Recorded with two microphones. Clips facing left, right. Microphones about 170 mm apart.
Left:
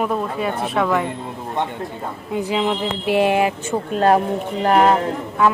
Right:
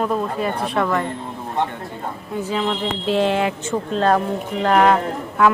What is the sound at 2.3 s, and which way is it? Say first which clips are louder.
Speech: left 2 dB; 15° left (ahead or behind).